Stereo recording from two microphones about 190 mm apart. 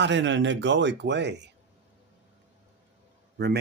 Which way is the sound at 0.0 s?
70° right (ahead or behind).